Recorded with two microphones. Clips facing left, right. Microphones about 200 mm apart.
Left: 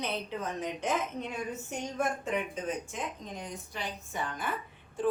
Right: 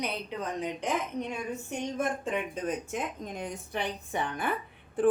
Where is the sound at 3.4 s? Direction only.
60° right (ahead or behind).